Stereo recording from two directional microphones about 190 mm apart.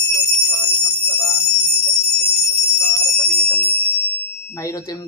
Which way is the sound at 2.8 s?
5° left (ahead or behind).